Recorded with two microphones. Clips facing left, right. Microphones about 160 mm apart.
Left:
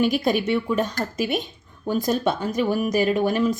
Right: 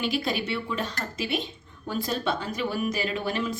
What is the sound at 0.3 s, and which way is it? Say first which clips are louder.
Speech: left 8 dB; 45° left (ahead or behind).